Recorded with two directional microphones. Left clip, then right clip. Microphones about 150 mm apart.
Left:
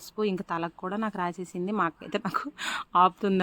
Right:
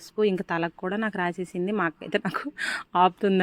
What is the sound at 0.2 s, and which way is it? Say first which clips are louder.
Speech: right 5 dB; 15° right (ahead or behind).